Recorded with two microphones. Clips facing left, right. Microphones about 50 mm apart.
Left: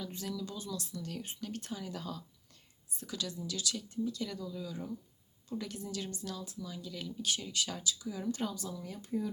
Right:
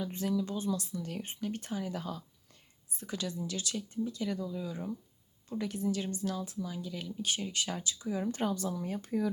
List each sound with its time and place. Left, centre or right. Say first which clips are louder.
0.0 s speech: right 7 dB; right
0.9 s speech: right 3 dB; centre
7.3 s speech: right 1 dB; right
9.0 s speech: right 2 dB; right